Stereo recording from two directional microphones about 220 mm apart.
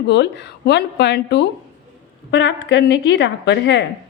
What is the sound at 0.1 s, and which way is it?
A woman's voice, 50° left (ahead or behind).